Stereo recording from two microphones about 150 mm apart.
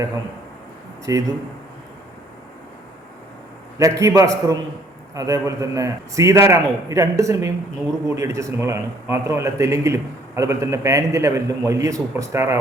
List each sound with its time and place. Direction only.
1.1 s a man's voice: 20° right (ahead or behind)
3.8 s a man's voice: 20° right (ahead or behind)